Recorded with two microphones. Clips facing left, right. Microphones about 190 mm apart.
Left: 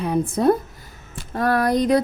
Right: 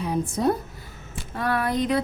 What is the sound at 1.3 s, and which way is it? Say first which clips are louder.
Speech: left 6 dB; 40° left (ahead or behind).